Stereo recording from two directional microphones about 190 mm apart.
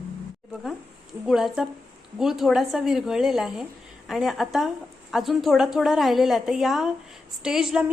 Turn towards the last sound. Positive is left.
turn(degrees=-5)  # may be behind; listen again after turning